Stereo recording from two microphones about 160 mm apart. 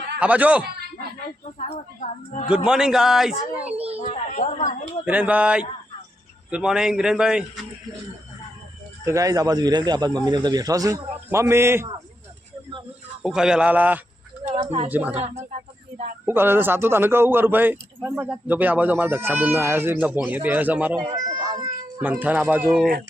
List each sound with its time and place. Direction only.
0.2 s speech: 10° right (ahead or behind)
2.6 s speech: 5° right (ahead or behind)
3.9 s a woman's voice: 45° left (ahead or behind)
5.0 s speech: 10° right (ahead or behind)
9.0 s speech: 20° right (ahead or behind)
13.2 s speech: 5° right (ahead or behind)
14.5 s speech: 40° right (ahead or behind)
14.8 s speech: 10° right (ahead or behind)
15.2 s speech: 45° right (ahead or behind)
16.2 s speech: 15° right (ahead or behind)
21.4 s a sound: 25° right (ahead or behind)
22.0 s speech: 10° right (ahead or behind)